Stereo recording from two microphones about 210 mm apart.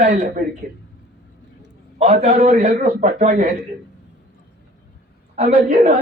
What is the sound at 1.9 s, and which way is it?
A man's voice, 30° right (ahead or behind).